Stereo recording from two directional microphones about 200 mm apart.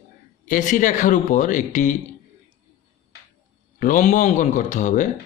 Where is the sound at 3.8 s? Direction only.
40° left (ahead or behind).